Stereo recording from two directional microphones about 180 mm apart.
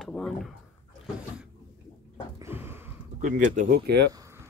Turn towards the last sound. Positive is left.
turn(degrees=-15)  # may be behind; listen again after turning